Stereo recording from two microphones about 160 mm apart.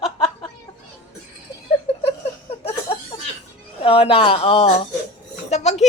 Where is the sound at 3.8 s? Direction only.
35° left (ahead or behind).